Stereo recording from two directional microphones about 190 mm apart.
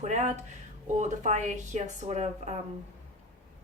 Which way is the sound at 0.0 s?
35° right (ahead or behind).